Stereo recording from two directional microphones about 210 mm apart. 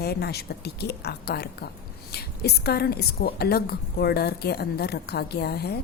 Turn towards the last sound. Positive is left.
turn(degrees=50)  # may be behind; listen again after turning